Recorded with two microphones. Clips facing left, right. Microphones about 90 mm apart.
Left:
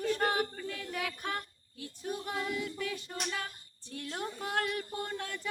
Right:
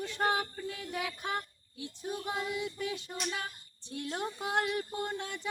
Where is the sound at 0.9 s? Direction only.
10° right (ahead or behind).